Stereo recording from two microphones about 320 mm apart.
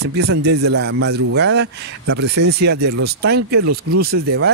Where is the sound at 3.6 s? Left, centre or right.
Right.